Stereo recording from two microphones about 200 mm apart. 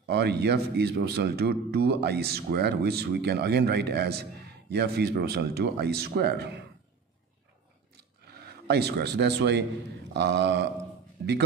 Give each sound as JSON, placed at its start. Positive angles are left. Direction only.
{"t": 0.1, "sound": "a man's voice", "side_deg": -55}
{"t": 8.3, "sound": "speech", "side_deg": -50}